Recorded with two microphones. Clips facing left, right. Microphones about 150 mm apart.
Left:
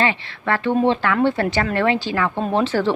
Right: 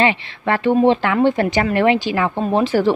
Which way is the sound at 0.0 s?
20° right (ahead or behind).